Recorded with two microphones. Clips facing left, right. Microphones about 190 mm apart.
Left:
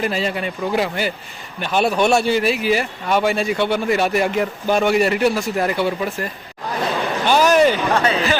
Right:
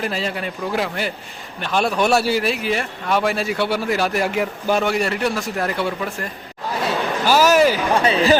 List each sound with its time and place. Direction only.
0.0 s a man's voice: centre (ahead or behind)
7.3 s speech: 5° right (ahead or behind)
8.0 s speech: 30° right (ahead or behind)